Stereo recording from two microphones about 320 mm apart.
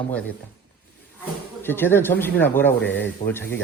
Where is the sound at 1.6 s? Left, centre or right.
Centre.